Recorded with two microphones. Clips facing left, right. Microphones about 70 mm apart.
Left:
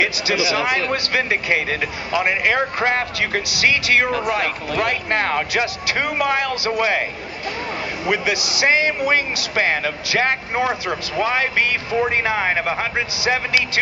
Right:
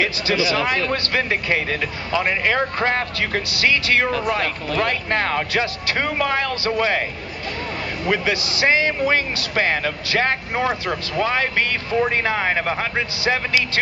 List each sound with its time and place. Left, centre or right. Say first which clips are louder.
0.0 s speech: even; centre
8.0 s speech: even; centre